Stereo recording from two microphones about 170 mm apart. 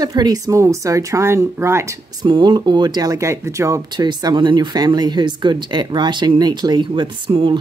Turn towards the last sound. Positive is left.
turn(degrees=-30)  # may be behind; listen again after turning